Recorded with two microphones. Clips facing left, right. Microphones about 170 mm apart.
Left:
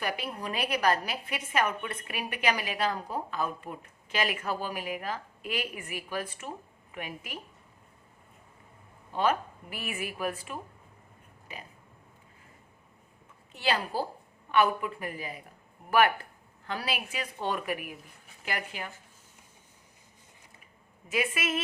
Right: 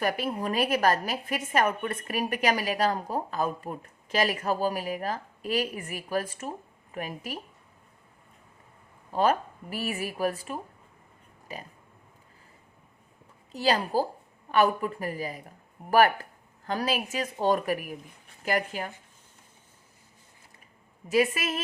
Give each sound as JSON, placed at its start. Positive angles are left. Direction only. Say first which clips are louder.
{"t": 0.0, "sound": "a woman's voice", "louder": "right 6 dB", "side_deg": -50}
{"t": 9.1, "sound": "a woman's voice", "louder": "right 3 dB", "side_deg": -40}
{"t": 13.5, "sound": "a woman's voice", "louder": "right 5 dB", "side_deg": -40}
{"t": 21.1, "sound": "a woman's voice", "louder": "right 5 dB", "side_deg": -35}